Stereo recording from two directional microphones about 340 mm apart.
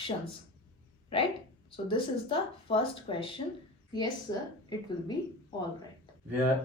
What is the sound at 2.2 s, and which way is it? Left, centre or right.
Speech, centre.